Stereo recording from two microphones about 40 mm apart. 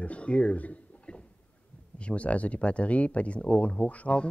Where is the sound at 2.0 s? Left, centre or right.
Left.